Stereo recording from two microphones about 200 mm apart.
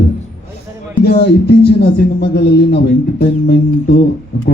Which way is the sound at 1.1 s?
55° left (ahead or behind).